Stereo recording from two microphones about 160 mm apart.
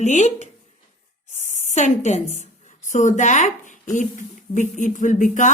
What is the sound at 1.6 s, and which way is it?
A woman's voice, 45° left (ahead or behind).